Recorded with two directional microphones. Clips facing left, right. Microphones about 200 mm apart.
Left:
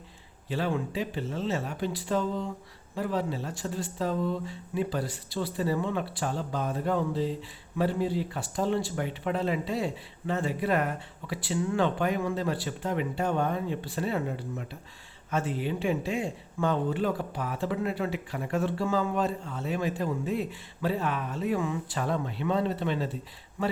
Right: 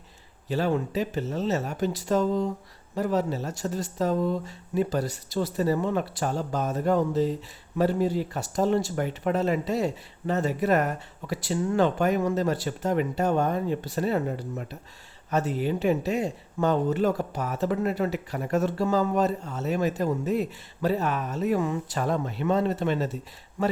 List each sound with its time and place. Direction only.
0.4 s speech: 40° right (ahead or behind)